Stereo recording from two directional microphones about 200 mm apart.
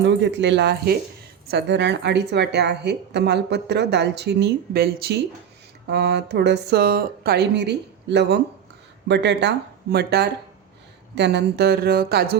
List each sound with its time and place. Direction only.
0.0 s a woman's voice: 60° right (ahead or behind)